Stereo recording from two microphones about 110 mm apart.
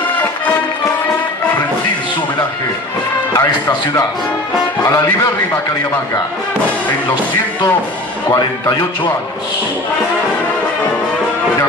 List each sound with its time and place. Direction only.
3.3 s speech: 25° left (ahead or behind)
8.4 s speech: 40° left (ahead or behind)